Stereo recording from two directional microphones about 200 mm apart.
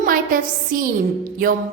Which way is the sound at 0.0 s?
45° right (ahead or behind).